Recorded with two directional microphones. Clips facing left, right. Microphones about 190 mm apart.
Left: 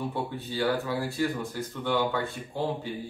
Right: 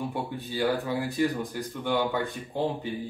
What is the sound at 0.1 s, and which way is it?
Speech, 15° right (ahead or behind).